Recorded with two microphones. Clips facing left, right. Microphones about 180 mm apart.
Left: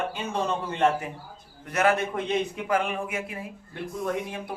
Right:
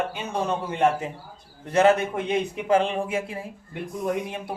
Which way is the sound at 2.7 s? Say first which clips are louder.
Right 5 dB; 30° right (ahead or behind).